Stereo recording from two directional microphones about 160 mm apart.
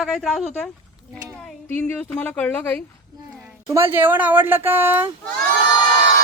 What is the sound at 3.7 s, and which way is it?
Speech, 15° right (ahead or behind).